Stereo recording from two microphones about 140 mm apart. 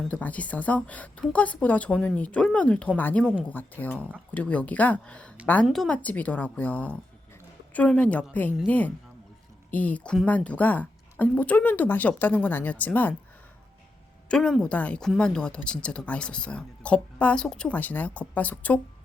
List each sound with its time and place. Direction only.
0.1 s speech: 10° left (ahead or behind)
14.3 s speech: 5° left (ahead or behind)